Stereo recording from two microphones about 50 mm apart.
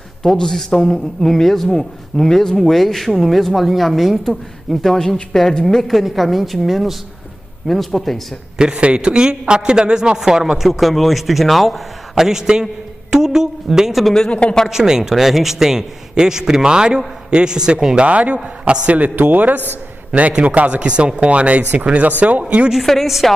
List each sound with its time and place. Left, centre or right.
0.2 s a man's voice: centre
4.8 s a man's voice: centre
8.5 s a man's voice: centre
14.0 s speech: centre
14.7 s a man's voice: centre; by 19.6 s right
20.1 s a man's voice: right
22.8 s a man's voice: centre